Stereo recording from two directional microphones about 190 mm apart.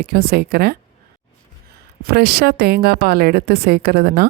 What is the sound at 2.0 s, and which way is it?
A woman's voice, 55° right (ahead or behind).